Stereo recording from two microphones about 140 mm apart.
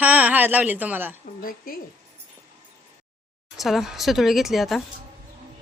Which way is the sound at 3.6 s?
Centre (ahead or behind).